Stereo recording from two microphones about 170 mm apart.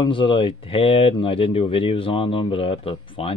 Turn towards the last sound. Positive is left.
turn(degrees=35)  # may be behind; listen again after turning